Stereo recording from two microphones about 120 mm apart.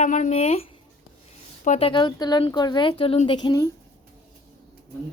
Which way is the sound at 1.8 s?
45° left (ahead or behind).